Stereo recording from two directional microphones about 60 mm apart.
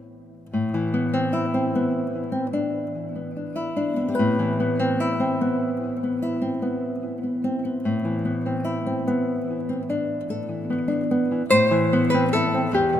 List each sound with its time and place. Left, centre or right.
0.6 s guitar: left
3.7 s music: left
7.4 s guitar: left
8.9 s music: left
10.7 s music: left